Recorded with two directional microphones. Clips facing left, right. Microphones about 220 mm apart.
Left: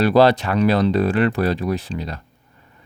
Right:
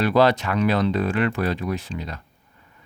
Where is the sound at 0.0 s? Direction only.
35° left (ahead or behind).